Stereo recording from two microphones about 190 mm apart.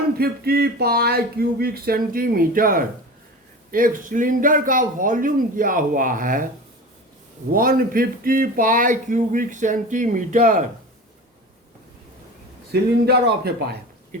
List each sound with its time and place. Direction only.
0.2 s speech: 55° right (ahead or behind)
7.5 s speech: 50° right (ahead or behind)
12.7 s speech: 55° right (ahead or behind)